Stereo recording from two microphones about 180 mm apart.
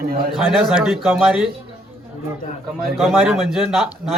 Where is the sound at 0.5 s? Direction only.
Centre (ahead or behind).